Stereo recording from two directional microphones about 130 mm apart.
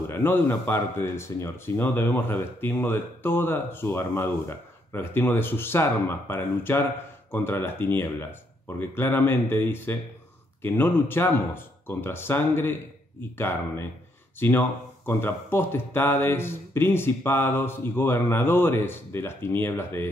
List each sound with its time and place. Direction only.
0.1 s speech: 15° left (ahead or behind)